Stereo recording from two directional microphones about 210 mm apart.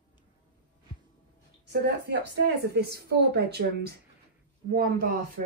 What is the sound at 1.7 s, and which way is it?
A woman's voice, 50° right (ahead or behind).